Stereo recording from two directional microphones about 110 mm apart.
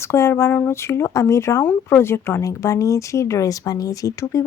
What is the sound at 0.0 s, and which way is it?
Speech, 25° left (ahead or behind).